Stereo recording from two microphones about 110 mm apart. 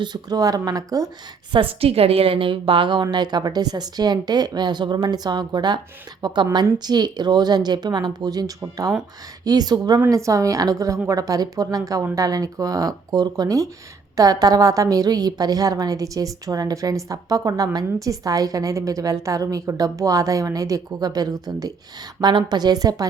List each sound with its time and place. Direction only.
0.0 s a woman's voice: 40° right (ahead or behind)
1.5 s a woman's voice: 60° right (ahead or behind); by 23.0 s 35° right (ahead or behind)